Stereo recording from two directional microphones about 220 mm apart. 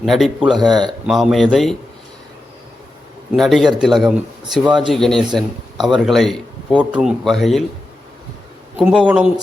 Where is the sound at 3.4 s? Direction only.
Centre (ahead or behind).